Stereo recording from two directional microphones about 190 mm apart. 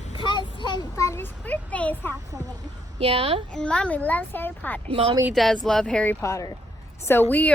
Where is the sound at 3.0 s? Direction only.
30° right (ahead or behind).